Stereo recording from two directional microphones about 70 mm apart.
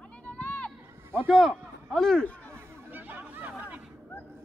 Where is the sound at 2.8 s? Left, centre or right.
Right.